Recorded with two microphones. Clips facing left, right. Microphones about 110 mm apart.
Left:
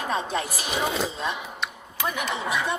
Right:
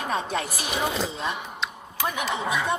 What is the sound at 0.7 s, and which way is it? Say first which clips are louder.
Speech: left 1 dB; centre (ahead or behind).